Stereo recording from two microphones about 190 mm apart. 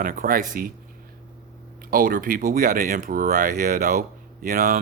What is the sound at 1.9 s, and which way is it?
Speech, 50° right (ahead or behind).